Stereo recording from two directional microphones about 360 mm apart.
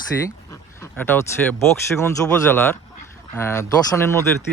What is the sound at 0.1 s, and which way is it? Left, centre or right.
Speech, centre.